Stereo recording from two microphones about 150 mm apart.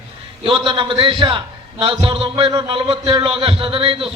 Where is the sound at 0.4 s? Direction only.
35° right (ahead or behind).